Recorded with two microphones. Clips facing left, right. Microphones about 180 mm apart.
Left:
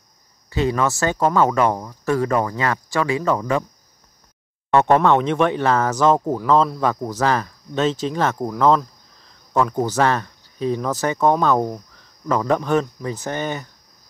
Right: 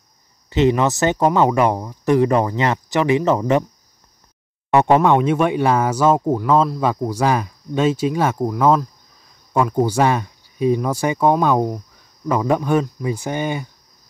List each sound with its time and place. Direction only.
0.5 s speech: 20° right (ahead or behind)
4.6 s speech: 10° right (ahead or behind)